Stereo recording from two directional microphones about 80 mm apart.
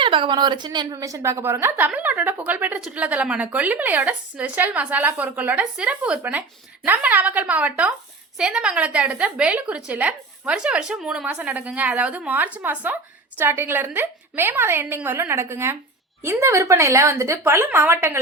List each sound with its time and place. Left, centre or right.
0.0 s a woman's voice: right
0.9 s a woman's voice: right
1.7 s a woman's voice: right